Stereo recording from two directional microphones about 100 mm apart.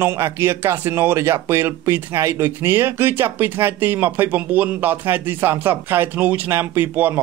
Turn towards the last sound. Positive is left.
turn(degrees=-20)  # may be behind; listen again after turning